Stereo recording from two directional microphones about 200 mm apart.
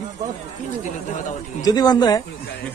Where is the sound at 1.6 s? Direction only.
20° left (ahead or behind).